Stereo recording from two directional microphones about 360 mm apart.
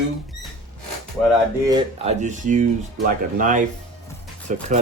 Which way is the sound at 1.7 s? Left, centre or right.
Centre.